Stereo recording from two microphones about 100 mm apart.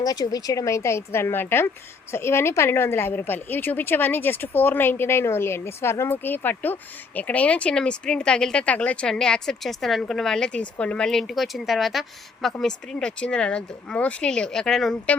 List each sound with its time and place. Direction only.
0.0 s a woman's voice: 40° left (ahead or behind); by 14.9 s 5° left (ahead or behind)